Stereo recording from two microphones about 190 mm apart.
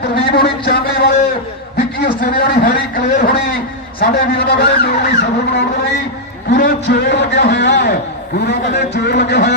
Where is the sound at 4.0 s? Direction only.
60° left (ahead or behind).